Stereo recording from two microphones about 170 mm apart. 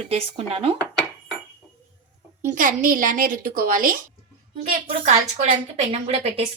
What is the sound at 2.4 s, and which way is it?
A woman's voice, 50° right (ahead or behind).